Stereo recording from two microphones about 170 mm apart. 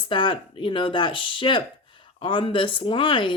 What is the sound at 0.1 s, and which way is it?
Speech, 30° left (ahead or behind).